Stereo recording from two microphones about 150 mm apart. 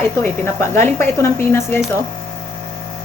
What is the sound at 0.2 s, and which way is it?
Speech, 15° left (ahead or behind).